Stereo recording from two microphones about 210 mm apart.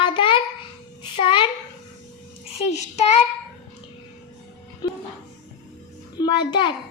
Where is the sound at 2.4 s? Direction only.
30° left (ahead or behind).